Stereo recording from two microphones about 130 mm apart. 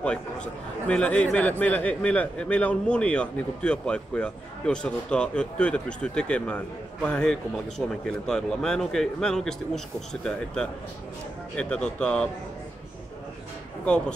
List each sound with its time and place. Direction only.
0.0 s a man's voice: 10° left (ahead or behind)
13.8 s a man's voice: 5° left (ahead or behind)